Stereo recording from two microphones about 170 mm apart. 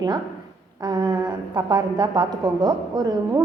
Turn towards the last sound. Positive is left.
turn(degrees=-20)  # may be behind; listen again after turning